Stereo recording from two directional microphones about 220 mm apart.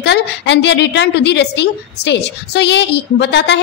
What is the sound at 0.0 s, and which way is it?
A woman's voice, 50° left (ahead or behind).